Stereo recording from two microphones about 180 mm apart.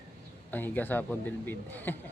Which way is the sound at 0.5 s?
10° left (ahead or behind).